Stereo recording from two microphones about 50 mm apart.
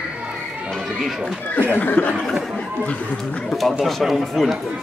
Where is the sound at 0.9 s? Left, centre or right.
Centre.